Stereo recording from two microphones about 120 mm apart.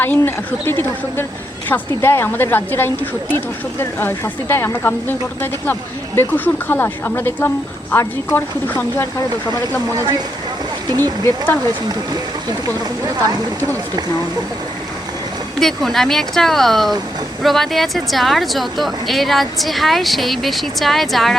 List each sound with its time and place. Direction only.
0.0 s a woman's voice: 15° left (ahead or behind)
9.9 s speech: 30° right (ahead or behind)
15.6 s a woman's voice: centre (ahead or behind)